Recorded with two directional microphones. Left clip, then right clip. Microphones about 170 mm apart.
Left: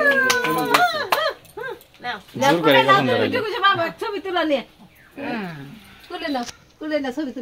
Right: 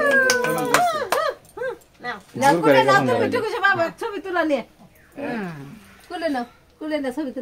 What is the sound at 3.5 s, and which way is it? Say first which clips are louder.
Speech: left 2 dB; 20° right (ahead or behind).